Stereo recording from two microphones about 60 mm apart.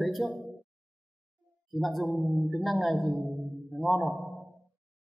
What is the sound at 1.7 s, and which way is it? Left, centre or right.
A man's voice, centre.